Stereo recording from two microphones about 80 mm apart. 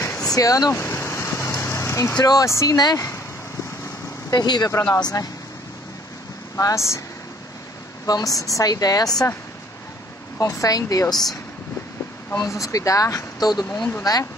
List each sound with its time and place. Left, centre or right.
0.2 s vehicle: left
2.1 s speech: left
2.4 s speech: left
4.3 s speech: left
6.6 s speech: left
8.1 s speech: left
10.4 s speech: left
11.1 s speech: centre
12.4 s speech: left